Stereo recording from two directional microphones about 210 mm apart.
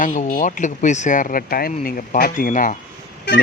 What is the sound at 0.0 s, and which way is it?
Speech, 40° left (ahead or behind).